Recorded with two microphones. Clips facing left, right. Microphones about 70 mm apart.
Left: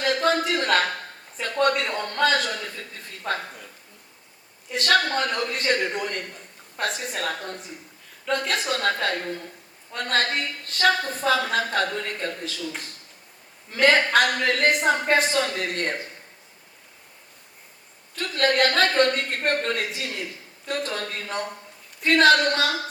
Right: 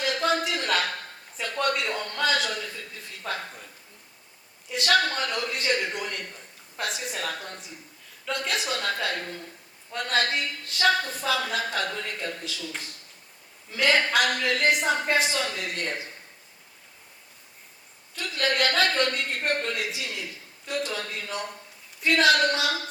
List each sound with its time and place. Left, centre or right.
0.0 s a sound: left
1.6 s speech: left
4.7 s speech: left
13.7 s speech: left
18.2 s speech: left